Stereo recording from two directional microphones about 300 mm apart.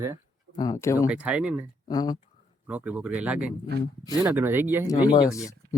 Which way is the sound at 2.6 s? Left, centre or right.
Centre.